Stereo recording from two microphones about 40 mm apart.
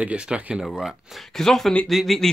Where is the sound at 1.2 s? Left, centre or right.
Centre.